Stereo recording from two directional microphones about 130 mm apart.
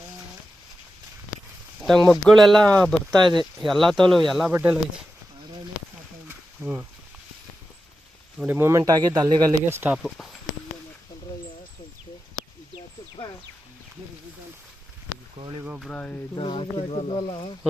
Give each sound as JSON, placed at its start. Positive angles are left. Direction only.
{"t": 1.8, "sound": "speech", "side_deg": 5}
{"t": 3.2, "sound": "speech", "side_deg": -35}
{"t": 3.7, "sound": "speech", "side_deg": 0}
{"t": 6.2, "sound": "wild animals", "side_deg": -15}
{"t": 8.4, "sound": "speech", "side_deg": -20}
{"t": 9.6, "sound": "speech", "side_deg": -15}
{"t": 15.4, "sound": "a sound", "side_deg": -30}
{"t": 15.6, "sound": "speech", "side_deg": -10}
{"t": 15.9, "sound": "speech", "side_deg": 10}
{"t": 16.3, "sound": "speech", "side_deg": 40}